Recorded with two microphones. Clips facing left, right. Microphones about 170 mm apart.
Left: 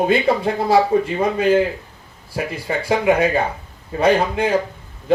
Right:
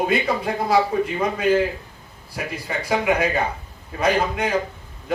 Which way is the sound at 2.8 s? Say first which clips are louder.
Left 4 dB; 30° left (ahead or behind).